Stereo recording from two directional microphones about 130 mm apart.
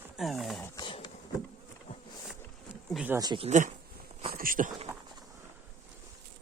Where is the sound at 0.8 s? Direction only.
35° left (ahead or behind).